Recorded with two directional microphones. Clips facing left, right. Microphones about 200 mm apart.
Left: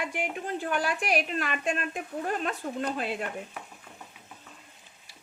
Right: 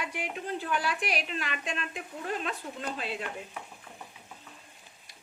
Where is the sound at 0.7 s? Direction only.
50° left (ahead or behind).